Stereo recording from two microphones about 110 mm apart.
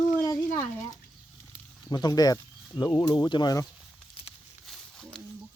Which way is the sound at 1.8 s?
35° left (ahead or behind).